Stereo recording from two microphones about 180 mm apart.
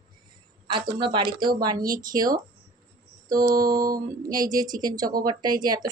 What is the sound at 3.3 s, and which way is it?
Mantra, 55° right (ahead or behind).